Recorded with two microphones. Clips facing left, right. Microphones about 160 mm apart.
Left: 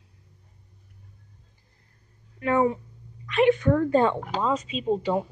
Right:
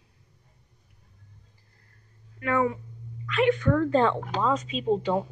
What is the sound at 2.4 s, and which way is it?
A woman's voice, 25° left (ahead or behind).